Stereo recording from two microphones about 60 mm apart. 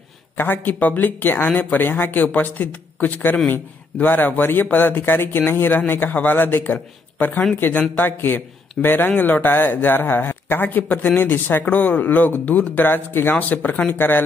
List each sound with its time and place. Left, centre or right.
0.4 s speech: left